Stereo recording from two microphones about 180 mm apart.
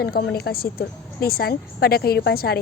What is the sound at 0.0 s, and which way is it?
A woman's voice, 60° left (ahead or behind).